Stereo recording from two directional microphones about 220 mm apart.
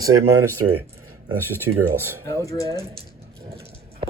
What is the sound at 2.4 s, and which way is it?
Speech, 15° left (ahead or behind).